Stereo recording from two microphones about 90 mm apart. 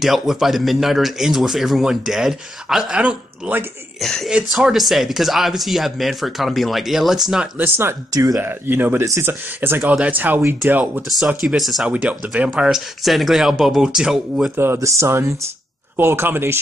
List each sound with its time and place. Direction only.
0.0 s a man's voice: 5° right (ahead or behind)
4.0 s a man's voice: 5° left (ahead or behind)
7.5 s speech: 25° right (ahead or behind)
8.1 s speech: 40° right (ahead or behind)
8.4 s speech: 25° right (ahead or behind)
11.5 s a man's voice: centre (ahead or behind)
11.9 s a man's voice: 15° right (ahead or behind)
14.6 s speech: 30° right (ahead or behind)